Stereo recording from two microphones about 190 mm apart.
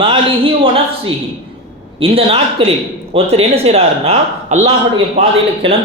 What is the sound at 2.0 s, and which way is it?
A man's voice, 30° right (ahead or behind).